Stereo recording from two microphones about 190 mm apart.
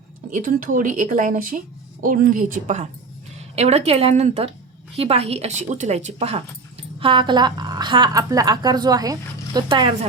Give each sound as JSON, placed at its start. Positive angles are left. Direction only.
{"t": 0.3, "sound": "a woman's voice", "side_deg": -45}